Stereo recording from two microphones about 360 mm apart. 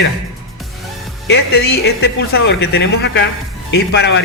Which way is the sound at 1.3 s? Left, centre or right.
Left.